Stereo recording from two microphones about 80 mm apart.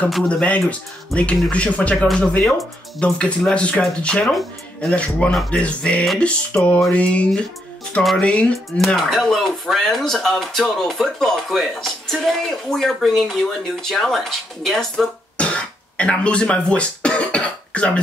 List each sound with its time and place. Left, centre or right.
0.3 s speech: centre
8.7 s speech: centre
15.3 s speech: centre